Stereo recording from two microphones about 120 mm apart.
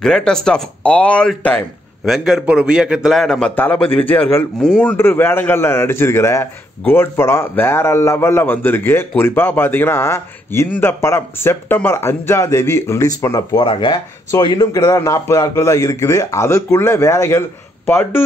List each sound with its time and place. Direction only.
0.0 s speech: 5° left (ahead or behind)
2.0 s a man's voice: centre (ahead or behind); by 13.7 s 25° left (ahead or behind)
13.7 s a man's voice: 40° left (ahead or behind); by 18.2 s 20° left (ahead or behind)